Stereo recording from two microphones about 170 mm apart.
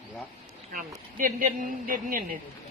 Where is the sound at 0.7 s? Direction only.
55° right (ahead or behind).